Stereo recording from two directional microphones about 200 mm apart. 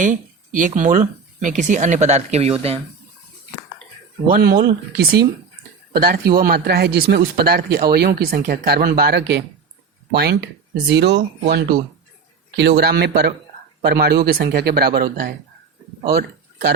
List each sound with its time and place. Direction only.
0.0 s speech: 40° right (ahead or behind)
4.3 s speech: 50° right (ahead or behind)
10.8 s speech: 60° right (ahead or behind)